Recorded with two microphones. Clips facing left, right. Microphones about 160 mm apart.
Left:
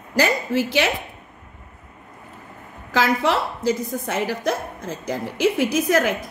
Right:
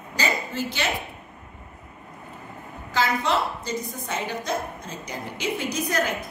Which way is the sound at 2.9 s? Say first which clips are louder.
Left 4 dB; 90° left.